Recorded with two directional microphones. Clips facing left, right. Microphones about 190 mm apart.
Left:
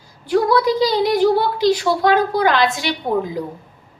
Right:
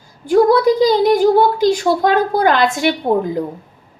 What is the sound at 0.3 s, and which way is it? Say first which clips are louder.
A woman's voice: right 5 dB; 45° right (ahead or behind).